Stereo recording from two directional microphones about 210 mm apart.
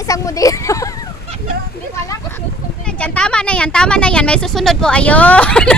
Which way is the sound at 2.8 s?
5° left (ahead or behind).